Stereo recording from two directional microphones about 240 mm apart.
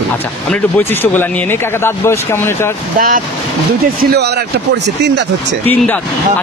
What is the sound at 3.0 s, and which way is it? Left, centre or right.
Speech, right.